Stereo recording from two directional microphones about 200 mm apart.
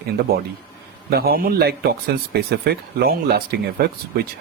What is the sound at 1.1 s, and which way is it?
Speech, 50° right (ahead or behind).